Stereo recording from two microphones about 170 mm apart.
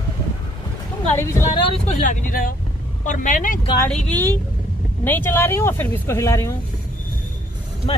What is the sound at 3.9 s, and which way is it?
Speech, 10° left (ahead or behind).